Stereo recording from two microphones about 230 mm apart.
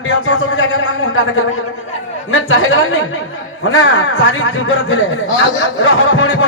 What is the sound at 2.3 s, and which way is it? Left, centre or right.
A man's voice, left.